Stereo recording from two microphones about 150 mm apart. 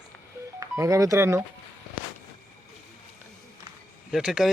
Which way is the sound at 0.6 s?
20° right (ahead or behind).